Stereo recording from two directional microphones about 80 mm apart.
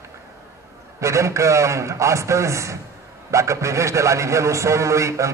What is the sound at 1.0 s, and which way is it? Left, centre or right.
A man's voice, right.